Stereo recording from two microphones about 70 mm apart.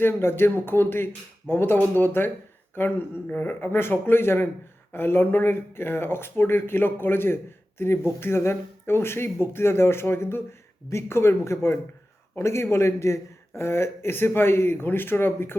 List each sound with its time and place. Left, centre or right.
0.0 s speech: left